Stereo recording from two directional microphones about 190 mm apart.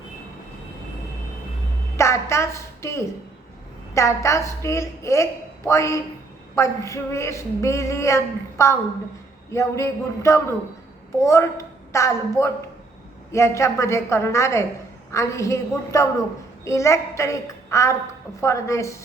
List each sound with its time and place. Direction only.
2.0 s a woman's voice: 15° left (ahead or behind)